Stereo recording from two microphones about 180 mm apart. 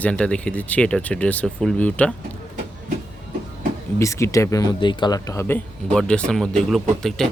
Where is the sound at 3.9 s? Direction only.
15° left (ahead or behind).